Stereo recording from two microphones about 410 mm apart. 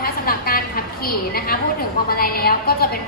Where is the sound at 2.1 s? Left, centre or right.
Left.